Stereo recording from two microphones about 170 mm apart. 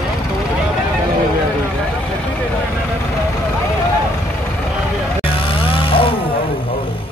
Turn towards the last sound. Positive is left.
turn(degrees=30)  # may be behind; listen again after turning